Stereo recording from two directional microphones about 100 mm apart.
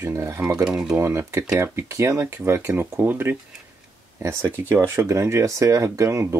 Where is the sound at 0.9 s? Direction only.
30° right (ahead or behind).